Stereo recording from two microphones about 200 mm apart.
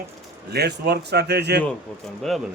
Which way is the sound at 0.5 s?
55° right (ahead or behind).